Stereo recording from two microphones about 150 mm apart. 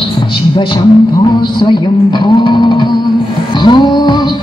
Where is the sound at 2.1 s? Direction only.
30° left (ahead or behind).